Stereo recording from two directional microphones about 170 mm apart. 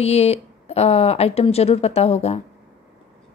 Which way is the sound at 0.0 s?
40° left (ahead or behind).